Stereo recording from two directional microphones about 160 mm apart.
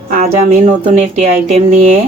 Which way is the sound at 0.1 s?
50° right (ahead or behind).